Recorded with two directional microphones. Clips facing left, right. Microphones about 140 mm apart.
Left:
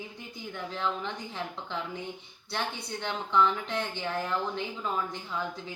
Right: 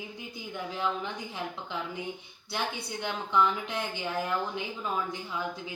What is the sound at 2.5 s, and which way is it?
Speech, 10° right (ahead or behind).